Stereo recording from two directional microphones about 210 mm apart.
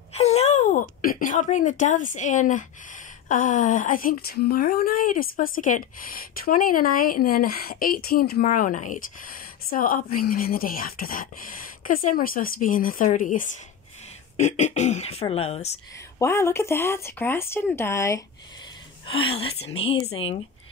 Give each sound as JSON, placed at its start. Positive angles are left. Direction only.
{"t": 0.1, "sound": "a sound", "side_deg": 30}
{"t": 3.3, "sound": "speech", "side_deg": 40}
{"t": 16.2, "sound": "speech", "side_deg": 15}
{"t": 19.0, "sound": "a woman's voice", "side_deg": 25}